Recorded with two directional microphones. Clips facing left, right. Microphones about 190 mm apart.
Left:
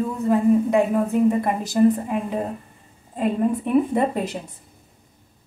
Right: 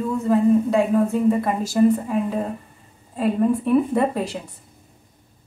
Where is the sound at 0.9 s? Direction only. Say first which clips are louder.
Right 1 dB; 15° left (ahead or behind).